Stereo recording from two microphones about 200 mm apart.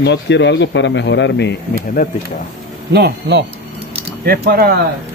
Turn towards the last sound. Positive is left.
turn(degrees=-50)  # may be behind; listen again after turning